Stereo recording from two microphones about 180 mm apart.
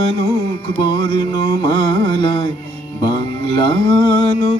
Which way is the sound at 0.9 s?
30° left (ahead or behind).